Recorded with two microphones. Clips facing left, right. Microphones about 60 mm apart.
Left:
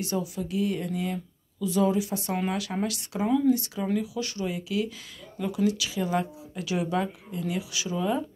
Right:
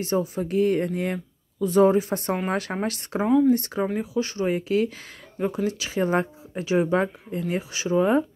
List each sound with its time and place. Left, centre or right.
0.0 s speech: right